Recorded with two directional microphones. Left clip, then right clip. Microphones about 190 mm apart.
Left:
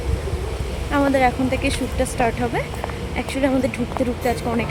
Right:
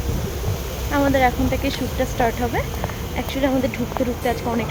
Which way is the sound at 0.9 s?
10° left (ahead or behind).